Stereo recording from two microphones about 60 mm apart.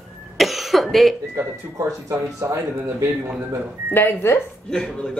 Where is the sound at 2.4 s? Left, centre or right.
Right.